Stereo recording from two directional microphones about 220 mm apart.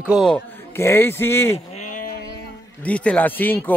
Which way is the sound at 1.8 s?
35° left (ahead or behind).